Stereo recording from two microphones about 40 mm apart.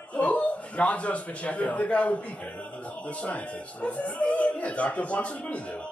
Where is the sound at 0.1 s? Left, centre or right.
Left.